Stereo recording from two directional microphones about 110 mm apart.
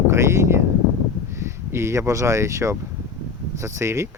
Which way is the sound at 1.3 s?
25° right (ahead or behind).